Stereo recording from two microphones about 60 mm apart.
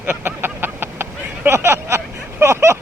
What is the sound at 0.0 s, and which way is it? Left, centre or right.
Vehicle, right.